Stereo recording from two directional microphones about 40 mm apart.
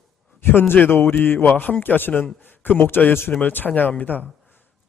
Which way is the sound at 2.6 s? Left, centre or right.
Left.